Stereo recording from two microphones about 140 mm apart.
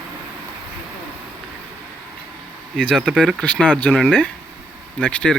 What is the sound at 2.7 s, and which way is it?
Speech, 5° left (ahead or behind).